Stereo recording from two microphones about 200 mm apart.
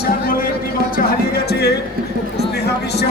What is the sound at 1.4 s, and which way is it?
Speech, 55° left (ahead or behind).